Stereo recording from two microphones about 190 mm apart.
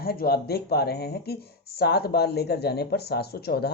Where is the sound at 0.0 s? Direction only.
50° left (ahead or behind).